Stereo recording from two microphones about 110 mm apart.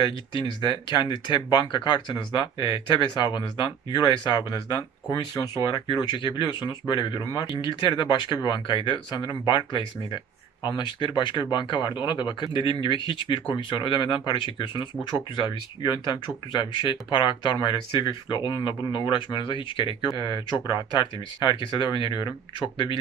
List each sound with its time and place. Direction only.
0.0 s speech: 50° left (ahead or behind)
11.0 s speech: 45° left (ahead or behind)